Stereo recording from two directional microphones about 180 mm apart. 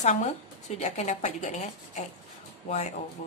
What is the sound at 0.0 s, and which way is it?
A woman's voice, 40° left (ahead or behind).